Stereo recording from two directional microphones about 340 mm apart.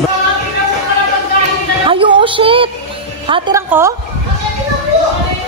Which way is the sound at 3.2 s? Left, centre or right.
Centre.